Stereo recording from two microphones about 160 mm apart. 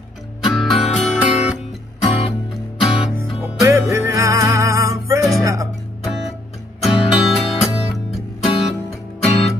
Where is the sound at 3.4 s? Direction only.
15° right (ahead or behind).